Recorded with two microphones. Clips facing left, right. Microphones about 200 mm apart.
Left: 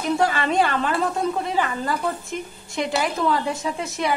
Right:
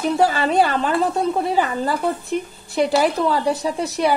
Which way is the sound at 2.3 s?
40° right (ahead or behind).